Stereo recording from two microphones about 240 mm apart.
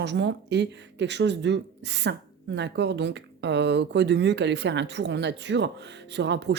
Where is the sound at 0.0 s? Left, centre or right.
Right.